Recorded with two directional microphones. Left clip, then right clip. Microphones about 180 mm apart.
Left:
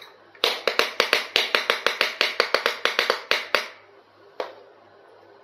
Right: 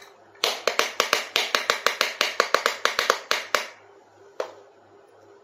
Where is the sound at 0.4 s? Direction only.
20° left (ahead or behind).